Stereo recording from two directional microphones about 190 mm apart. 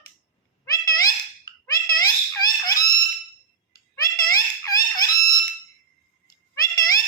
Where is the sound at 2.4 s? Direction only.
20° left (ahead or behind).